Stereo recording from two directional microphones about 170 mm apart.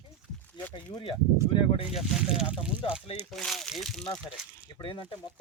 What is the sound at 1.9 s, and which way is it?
Speech, 5° right (ahead or behind).